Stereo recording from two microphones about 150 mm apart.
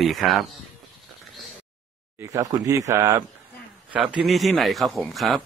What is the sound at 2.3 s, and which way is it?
Speech, 20° right (ahead or behind).